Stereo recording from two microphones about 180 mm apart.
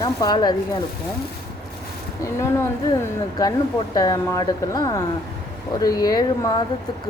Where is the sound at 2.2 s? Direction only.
15° left (ahead or behind).